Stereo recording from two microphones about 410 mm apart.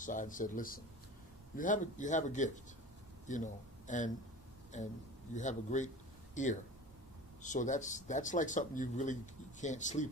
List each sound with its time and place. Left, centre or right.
0.0 s speech: centre